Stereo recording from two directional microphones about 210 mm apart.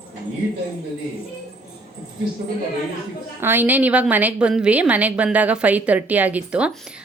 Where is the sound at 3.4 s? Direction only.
10° right (ahead or behind).